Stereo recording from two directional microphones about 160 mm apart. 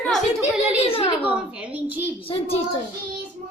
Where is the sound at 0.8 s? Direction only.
35° left (ahead or behind).